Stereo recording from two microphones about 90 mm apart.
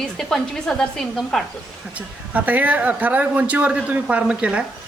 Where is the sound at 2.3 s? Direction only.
15° right (ahead or behind).